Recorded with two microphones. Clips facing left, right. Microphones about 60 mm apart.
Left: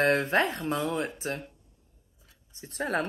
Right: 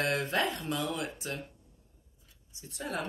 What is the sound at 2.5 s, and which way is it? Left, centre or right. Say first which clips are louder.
Speech: left 7 dB; left.